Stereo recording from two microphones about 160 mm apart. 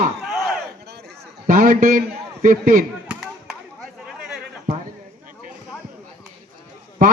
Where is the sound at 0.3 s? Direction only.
Centre (ahead or behind).